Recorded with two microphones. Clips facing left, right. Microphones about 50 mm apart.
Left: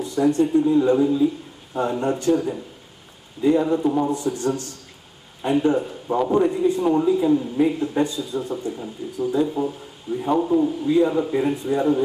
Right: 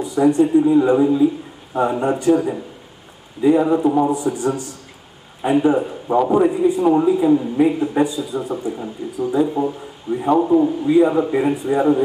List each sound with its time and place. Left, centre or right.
0.0 s a man's voice: centre